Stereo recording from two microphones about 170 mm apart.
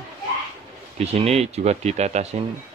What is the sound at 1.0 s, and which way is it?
Speech, 40° right (ahead or behind).